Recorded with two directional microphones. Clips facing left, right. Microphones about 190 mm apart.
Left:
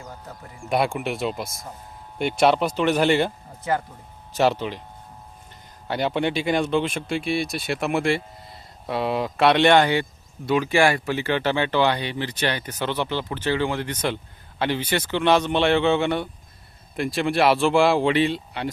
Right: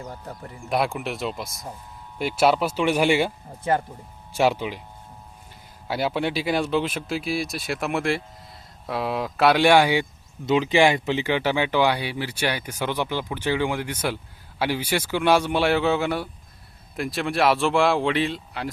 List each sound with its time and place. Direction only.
0.0 s speech: 35° right (ahead or behind)
0.7 s speech: centre (ahead or behind)
3.6 s speech: 25° right (ahead or behind)
4.4 s speech: 10° right (ahead or behind)
5.9 s speech: 5° right (ahead or behind)